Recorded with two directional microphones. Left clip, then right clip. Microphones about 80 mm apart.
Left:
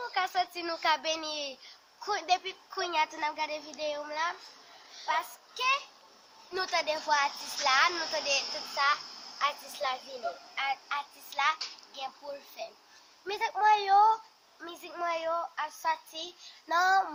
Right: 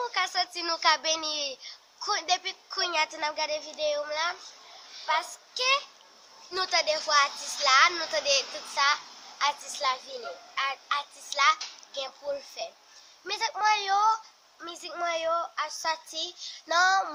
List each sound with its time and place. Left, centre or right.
0.1 s a woman's voice: right
8.4 s a child's voice: left
8.7 s a child's voice: right
9.4 s a child's voice: right
13.2 s a woman's voice: right